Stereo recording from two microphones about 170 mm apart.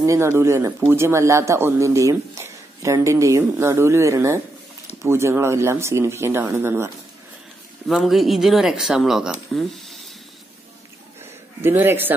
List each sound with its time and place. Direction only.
0.0 s speech: 15° right (ahead or behind)
7.9 s speech: centre (ahead or behind)
11.6 s speech: 10° right (ahead or behind)